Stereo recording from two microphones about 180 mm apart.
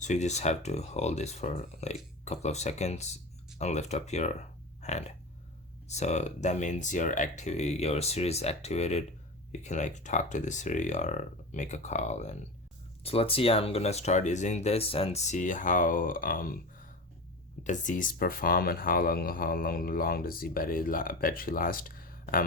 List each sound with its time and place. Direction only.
0.0 s speech: 40° left (ahead or behind)
4.8 s a sound: 40° left (ahead or behind)
5.9 s speech: 40° left (ahead or behind)
17.6 s speech: 45° left (ahead or behind)